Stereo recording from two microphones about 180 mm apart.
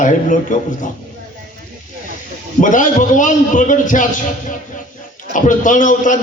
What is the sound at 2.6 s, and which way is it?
A man's voice, 45° left (ahead or behind).